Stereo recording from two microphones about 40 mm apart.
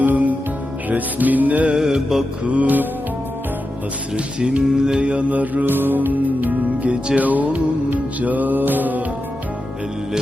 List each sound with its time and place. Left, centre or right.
0.0 s music: right
1.7 s music: centre
2.4 s mantra: right
4.4 s music: right
5.6 s music: right